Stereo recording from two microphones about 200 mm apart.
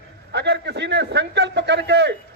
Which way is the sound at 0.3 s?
55° right (ahead or behind).